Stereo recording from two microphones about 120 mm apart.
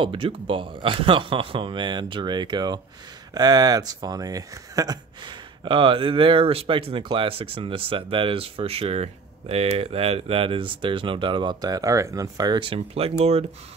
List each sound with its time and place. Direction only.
0.0 s speech: 45° right (ahead or behind)